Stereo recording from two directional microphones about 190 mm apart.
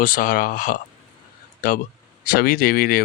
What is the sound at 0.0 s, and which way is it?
Speech, 45° left (ahead or behind).